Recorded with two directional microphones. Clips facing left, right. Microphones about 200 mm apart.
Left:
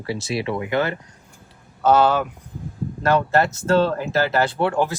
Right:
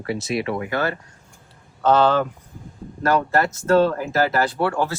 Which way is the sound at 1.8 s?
10° left (ahead or behind).